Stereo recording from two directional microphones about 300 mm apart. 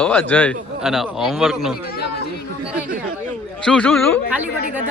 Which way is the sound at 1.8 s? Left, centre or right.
Left.